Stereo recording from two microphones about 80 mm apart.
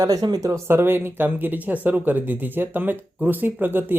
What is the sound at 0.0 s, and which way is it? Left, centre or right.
Speech, right.